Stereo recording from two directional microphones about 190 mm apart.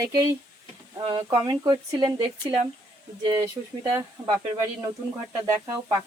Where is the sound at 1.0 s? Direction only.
20° right (ahead or behind).